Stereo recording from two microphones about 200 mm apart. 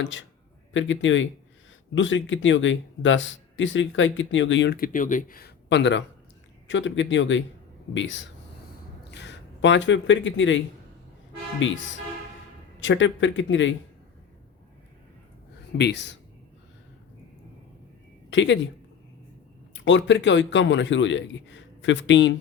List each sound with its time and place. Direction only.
0.0 s speech: 70° left (ahead or behind)
11.6 s speech: 70° left (ahead or behind)
12.8 s speech: 70° left (ahead or behind)
15.8 s speech: 60° left (ahead or behind)
18.3 s speech: 65° left (ahead or behind)
19.7 s speech: 65° left (ahead or behind)